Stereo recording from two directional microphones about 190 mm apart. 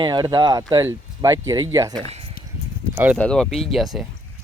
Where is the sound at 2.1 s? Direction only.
30° right (ahead or behind).